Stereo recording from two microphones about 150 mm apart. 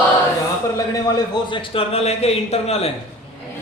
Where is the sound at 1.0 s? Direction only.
25° left (ahead or behind).